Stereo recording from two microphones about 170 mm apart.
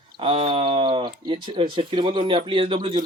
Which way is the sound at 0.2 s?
30° right (ahead or behind).